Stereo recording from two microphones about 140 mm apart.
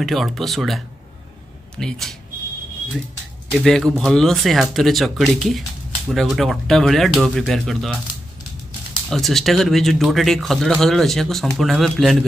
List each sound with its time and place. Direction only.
0.0 s speech: centre (ahead or behind)
3.5 s speech: 5° left (ahead or behind)
9.1 s speech: centre (ahead or behind)